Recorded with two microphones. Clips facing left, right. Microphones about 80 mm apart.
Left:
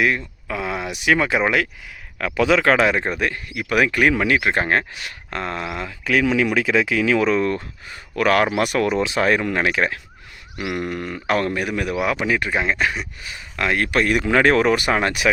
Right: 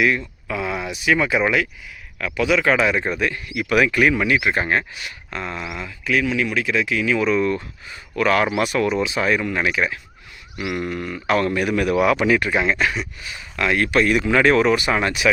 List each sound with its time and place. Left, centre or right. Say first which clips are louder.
0.4 s a sound: even; left
1.0 s speech: left 1 dB; left
2.1 s speech: left 2 dB; left
3.2 s speech: right 1 dB; left
4.9 s speech: left 2 dB; left
7.3 s speech: even; left
8.6 s speech: even; left
10.6 s speech: even; left
11.7 s speech: right 4 dB; centre; by 15.3 s left